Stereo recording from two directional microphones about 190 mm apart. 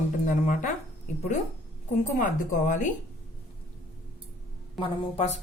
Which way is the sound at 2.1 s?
40° left (ahead or behind).